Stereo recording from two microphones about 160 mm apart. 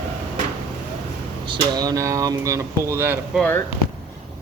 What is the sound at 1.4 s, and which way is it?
Speech, 30° right (ahead or behind).